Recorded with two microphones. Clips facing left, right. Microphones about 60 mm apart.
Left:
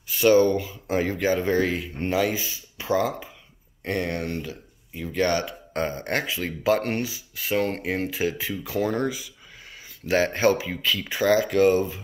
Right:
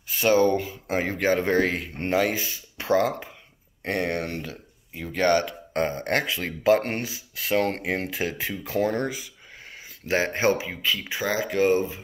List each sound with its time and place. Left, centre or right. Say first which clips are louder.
0.2 s speech: left 2 dB; right
7.3 s speech: right 1 dB; right
10.1 s speech: left 2 dB; right